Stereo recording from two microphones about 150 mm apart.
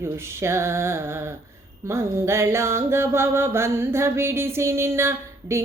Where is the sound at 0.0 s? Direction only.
15° right (ahead or behind).